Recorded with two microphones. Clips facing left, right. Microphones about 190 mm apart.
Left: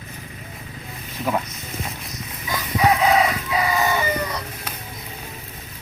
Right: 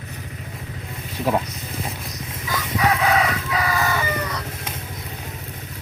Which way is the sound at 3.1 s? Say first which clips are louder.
Left 2 dB; 20° left (ahead or behind).